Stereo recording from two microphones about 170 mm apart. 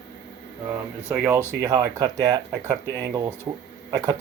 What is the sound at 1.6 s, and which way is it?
Speech, 15° right (ahead or behind).